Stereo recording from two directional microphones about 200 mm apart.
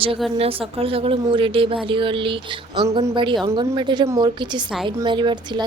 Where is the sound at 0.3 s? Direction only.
30° right (ahead or behind).